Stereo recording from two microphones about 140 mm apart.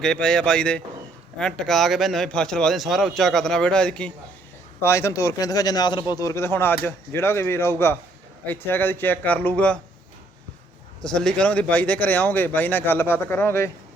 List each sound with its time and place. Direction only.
0.0 s speech: 5° left (ahead or behind)
4.8 s speech: 20° left (ahead or behind)
11.0 s speech: 5° left (ahead or behind)